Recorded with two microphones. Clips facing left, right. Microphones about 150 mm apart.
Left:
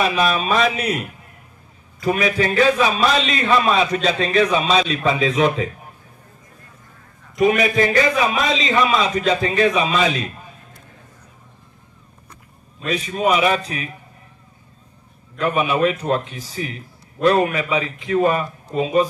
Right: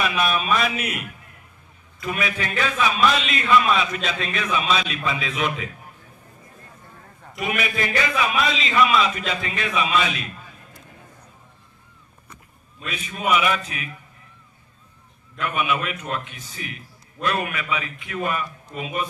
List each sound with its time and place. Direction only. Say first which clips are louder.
0.0 s a man's voice: left 4 dB; 35° left (ahead or behind)
7.3 s a man's voice: left 10 dB; 35° left (ahead or behind)
12.8 s a man's voice: left 7 dB; 35° left (ahead or behind)
15.3 s a man's voice: left 5 dB; 35° left (ahead or behind)